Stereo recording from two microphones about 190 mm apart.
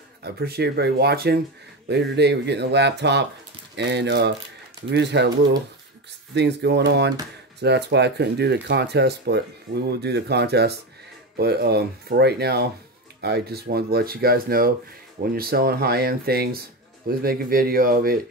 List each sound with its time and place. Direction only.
0.2 s speech: 55° right (ahead or behind)
6.3 s speech: 65° right (ahead or behind); by 18.2 s 50° right (ahead or behind)